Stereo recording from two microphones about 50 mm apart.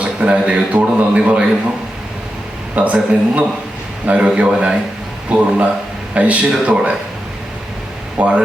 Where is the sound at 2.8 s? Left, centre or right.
Right.